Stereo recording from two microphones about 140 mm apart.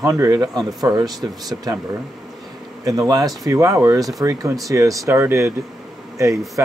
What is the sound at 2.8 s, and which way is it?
Speech, 25° right (ahead or behind).